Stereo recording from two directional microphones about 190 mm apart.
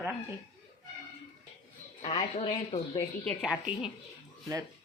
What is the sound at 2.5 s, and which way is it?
Speech, 20° left (ahead or behind).